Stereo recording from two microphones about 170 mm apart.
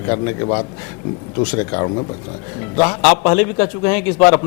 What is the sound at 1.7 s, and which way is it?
Speech, 25° left (ahead or behind).